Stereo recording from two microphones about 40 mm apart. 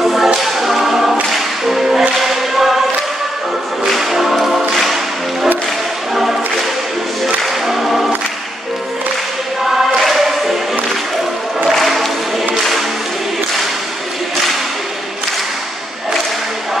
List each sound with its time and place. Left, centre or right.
0.0 s choir: centre
1.3 s whip: centre
3.8 s music: centre
7.2 s music: centre
10.0 s music: centre
11.7 s music: centre